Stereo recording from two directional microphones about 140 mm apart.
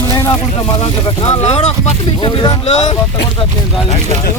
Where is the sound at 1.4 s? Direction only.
50° left (ahead or behind).